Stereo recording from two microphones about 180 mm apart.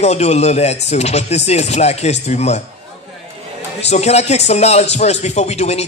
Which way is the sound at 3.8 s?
35° left (ahead or behind).